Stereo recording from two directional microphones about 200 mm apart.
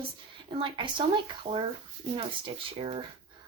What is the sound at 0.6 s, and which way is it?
Speech, 25° right (ahead or behind).